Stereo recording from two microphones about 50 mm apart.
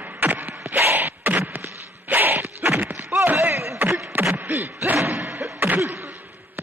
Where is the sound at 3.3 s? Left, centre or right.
Right.